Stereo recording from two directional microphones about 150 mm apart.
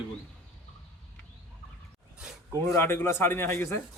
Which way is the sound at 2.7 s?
15° left (ahead or behind).